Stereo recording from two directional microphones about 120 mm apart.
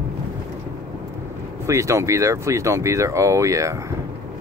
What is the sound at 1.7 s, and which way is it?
Speech, 25° right (ahead or behind).